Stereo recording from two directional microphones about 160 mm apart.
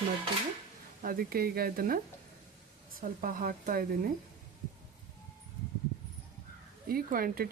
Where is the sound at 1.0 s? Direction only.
65° right (ahead or behind).